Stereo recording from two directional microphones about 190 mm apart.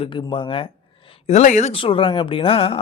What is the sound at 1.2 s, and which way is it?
Speech, 40° left (ahead or behind).